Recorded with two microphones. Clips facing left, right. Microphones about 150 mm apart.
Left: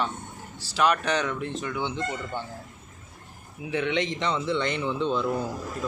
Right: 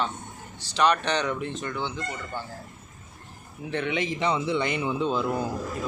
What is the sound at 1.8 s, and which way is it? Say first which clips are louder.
Speech: left 3 dB; 20° left (ahead or behind).